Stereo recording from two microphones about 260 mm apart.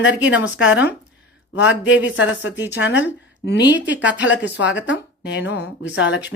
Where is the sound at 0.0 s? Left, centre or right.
Left.